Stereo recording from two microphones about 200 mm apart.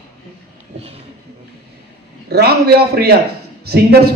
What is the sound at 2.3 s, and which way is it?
A man's voice, 50° right (ahead or behind).